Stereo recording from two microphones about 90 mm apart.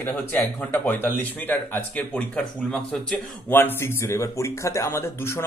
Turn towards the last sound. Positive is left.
turn(degrees=30)  # may be behind; listen again after turning